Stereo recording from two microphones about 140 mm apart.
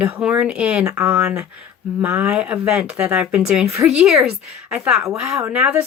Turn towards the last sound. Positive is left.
turn(degrees=-10)  # may be behind; listen again after turning